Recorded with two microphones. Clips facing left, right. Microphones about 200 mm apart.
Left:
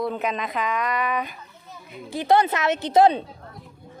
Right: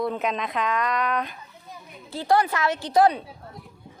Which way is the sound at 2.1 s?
20° left (ahead or behind).